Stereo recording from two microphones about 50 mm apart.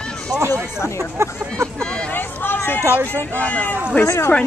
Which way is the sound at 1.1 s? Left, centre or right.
Right.